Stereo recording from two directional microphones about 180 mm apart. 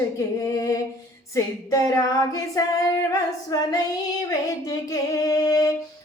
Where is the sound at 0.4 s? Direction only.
15° left (ahead or behind).